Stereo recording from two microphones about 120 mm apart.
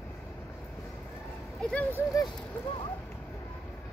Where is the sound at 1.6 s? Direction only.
10° left (ahead or behind).